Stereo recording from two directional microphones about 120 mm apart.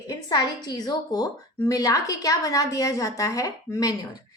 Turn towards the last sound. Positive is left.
turn(degrees=30)  # may be behind; listen again after turning